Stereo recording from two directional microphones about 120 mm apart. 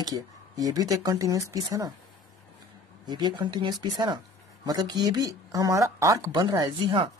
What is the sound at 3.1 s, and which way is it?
Speech, 40° right (ahead or behind).